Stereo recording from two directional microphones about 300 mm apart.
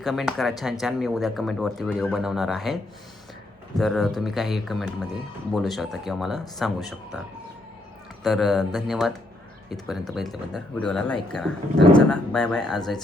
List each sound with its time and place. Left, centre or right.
0.0 s speech: centre
3.8 s speech: centre
8.2 s speech: centre